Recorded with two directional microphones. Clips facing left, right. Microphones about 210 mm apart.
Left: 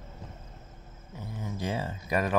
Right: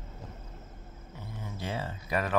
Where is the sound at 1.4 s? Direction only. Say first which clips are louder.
Left 4 dB; 15° left (ahead or behind).